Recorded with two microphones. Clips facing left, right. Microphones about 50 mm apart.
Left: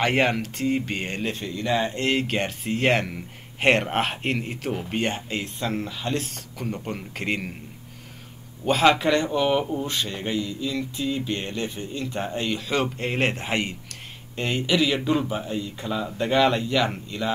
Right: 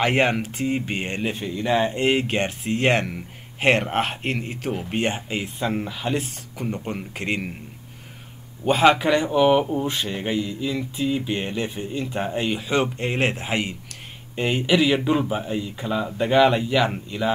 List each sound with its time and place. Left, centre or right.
0.0 s speech: centre
8.6 s speech: centre
12.7 s speech: centre